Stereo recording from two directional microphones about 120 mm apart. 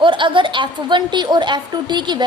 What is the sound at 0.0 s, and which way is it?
A woman's voice, 45° right (ahead or behind).